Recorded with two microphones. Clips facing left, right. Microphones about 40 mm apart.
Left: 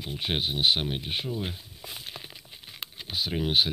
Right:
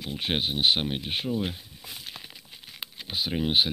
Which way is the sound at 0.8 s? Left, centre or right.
Centre.